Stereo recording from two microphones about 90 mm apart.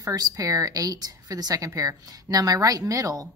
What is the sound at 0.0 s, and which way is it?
A woman's voice, 45° right (ahead or behind).